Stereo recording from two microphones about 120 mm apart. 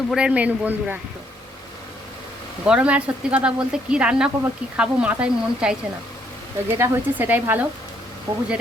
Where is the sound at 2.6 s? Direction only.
10° right (ahead or behind).